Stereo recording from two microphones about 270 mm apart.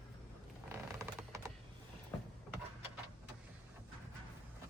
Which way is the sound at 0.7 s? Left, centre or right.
Centre.